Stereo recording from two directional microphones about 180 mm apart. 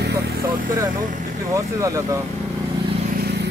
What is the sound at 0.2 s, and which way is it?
Vehicle, 60° right (ahead or behind).